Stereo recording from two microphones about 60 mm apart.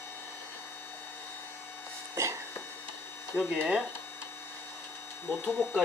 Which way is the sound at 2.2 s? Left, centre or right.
Right.